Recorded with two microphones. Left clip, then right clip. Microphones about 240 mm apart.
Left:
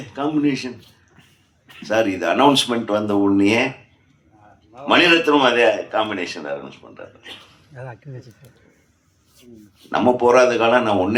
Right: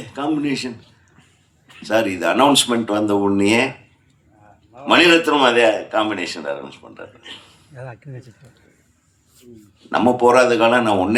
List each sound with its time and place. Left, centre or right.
0.0 s speech: right
1.8 s a man's voice: right
4.9 s a man's voice: right
7.8 s speech: centre
9.9 s a man's voice: right